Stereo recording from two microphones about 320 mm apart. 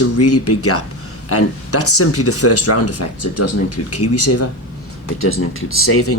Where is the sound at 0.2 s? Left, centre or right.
Left.